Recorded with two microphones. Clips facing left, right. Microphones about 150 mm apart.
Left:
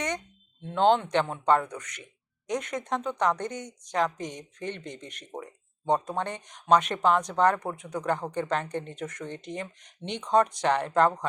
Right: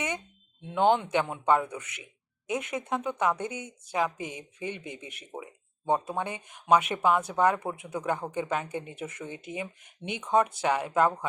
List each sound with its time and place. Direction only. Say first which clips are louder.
0.6 s speech: left 1 dB; 10° right (ahead or behind)